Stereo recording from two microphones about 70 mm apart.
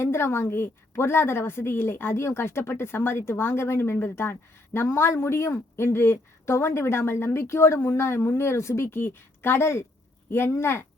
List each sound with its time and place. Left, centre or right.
0.0 s speech: left